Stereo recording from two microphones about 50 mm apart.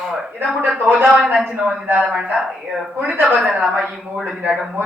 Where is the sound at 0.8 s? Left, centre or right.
Right.